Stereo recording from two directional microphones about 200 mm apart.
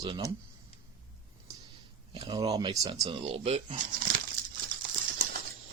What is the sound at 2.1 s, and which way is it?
Speech, 25° right (ahead or behind).